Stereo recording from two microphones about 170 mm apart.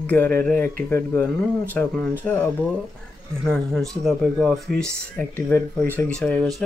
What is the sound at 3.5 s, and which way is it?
Speech, centre (ahead or behind).